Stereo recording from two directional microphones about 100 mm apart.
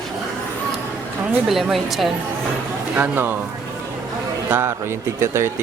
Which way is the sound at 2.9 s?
15° right (ahead or behind).